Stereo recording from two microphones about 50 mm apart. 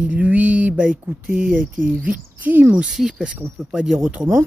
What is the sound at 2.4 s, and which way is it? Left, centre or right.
Speech, right.